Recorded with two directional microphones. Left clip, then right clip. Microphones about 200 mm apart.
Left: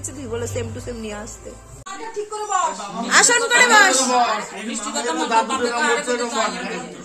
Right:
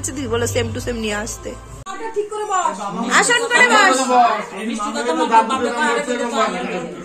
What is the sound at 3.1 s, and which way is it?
Speech, 15° left (ahead or behind).